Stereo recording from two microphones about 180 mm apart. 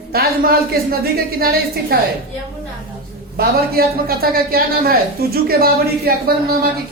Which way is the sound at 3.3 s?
55° right (ahead or behind).